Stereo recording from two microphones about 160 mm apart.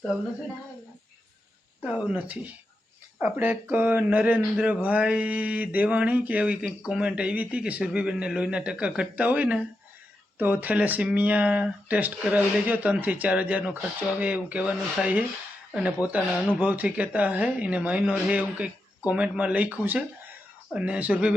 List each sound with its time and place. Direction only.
1.8 s speech: 5° right (ahead or behind)